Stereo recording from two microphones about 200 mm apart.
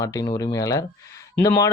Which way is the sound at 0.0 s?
20° left (ahead or behind).